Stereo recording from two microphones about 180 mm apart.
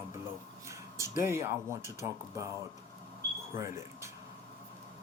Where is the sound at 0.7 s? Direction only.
15° right (ahead or behind).